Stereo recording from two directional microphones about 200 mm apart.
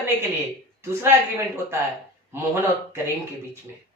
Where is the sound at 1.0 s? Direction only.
10° right (ahead or behind).